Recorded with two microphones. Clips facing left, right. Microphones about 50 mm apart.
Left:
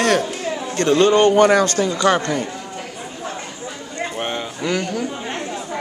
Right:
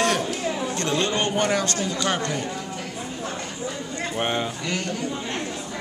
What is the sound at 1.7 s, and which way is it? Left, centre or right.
Speech, left.